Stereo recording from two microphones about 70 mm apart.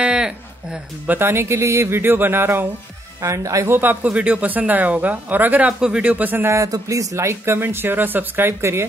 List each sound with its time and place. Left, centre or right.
0.0 s a sound: centre
1.0 s speech: right
3.2 s speech: right
3.7 s speech: right
6.5 s speech: right